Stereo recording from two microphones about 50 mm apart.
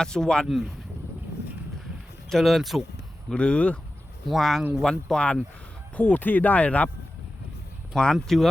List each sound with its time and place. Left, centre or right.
0.0 s speech: centre
0.4 s speech: centre
2.3 s speech: centre
3.2 s speech: left
4.3 s speech: centre
6.0 s speech: left
7.9 s speech: centre